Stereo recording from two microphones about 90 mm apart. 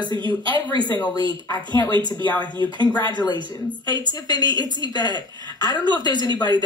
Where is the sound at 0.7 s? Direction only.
50° left (ahead or behind).